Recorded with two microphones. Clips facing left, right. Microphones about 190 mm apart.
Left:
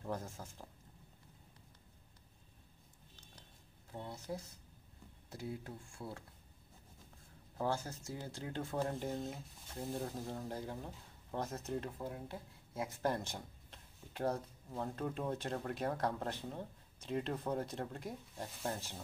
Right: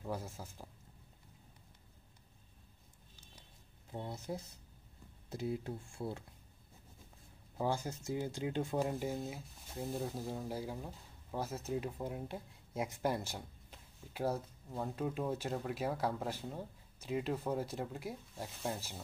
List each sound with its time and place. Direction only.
0.0 s speech: 5° right (ahead or behind)
3.9 s speech: 25° right (ahead or behind)
7.5 s speech: 15° right (ahead or behind)
12.0 s speech: 20° right (ahead or behind)